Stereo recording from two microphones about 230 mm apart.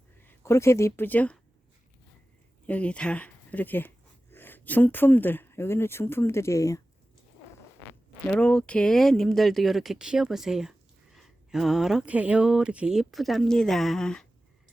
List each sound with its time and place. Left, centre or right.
0.2 s speech: centre
2.6 s speech: centre
8.3 s speech: centre